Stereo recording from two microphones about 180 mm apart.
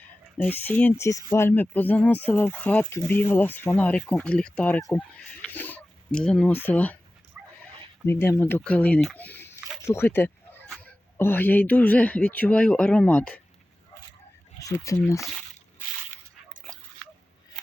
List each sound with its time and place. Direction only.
0.0 s speech: 10° left (ahead or behind)
7.3 s dog: 5° right (ahead or behind)
8.0 s speech: 15° left (ahead or behind)
14.6 s speech: 15° left (ahead or behind)